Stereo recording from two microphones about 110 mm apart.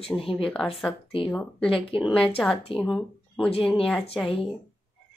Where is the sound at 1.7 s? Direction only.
55° left (ahead or behind).